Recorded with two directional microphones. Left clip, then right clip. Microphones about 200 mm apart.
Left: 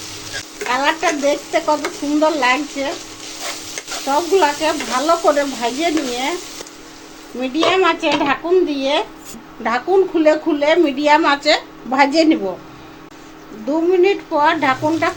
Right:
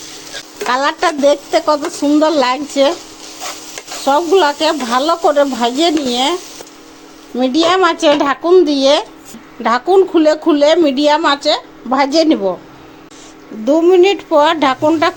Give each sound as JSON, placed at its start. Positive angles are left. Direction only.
{"t": 0.7, "sound": "stir", "side_deg": -45}
{"t": 2.2, "sound": "speech", "side_deg": -45}
{"t": 4.0, "sound": "stir", "side_deg": -35}
{"t": 7.4, "sound": "speech", "side_deg": -45}
{"t": 9.6, "sound": "stir", "side_deg": -35}
{"t": 11.0, "sound": "a woman's voice", "side_deg": -30}
{"t": 13.7, "sound": "speech", "side_deg": -45}